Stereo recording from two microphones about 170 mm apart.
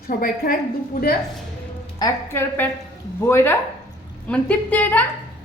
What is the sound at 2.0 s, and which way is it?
A woman's voice, 20° left (ahead or behind).